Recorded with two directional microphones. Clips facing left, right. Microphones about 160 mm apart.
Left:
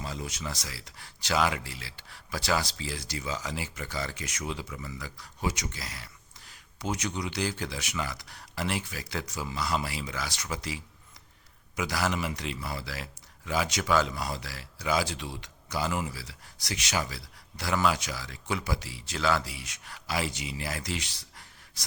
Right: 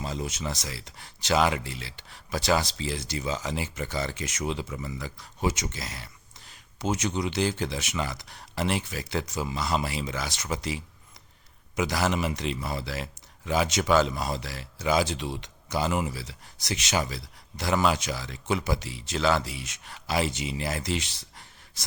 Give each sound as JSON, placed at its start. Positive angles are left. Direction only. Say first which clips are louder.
{"t": 0.0, "sound": "speech", "louder": "right 4 dB", "side_deg": -25}
{"t": 11.8, "sound": "speech", "louder": "right 4 dB", "side_deg": -25}